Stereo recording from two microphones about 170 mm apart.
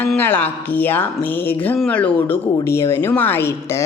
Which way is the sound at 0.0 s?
10° left (ahead or behind).